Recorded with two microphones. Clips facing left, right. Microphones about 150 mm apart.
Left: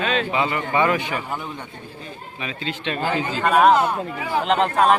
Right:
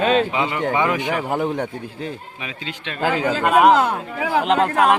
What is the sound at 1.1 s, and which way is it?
Speech, 80° right.